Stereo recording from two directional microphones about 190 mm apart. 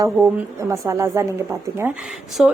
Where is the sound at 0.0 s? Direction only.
15° right (ahead or behind).